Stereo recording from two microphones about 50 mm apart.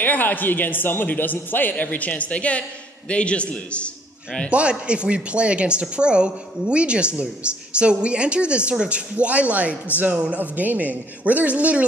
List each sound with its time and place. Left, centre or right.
0.0 s a man's voice: left
4.5 s a man's voice: right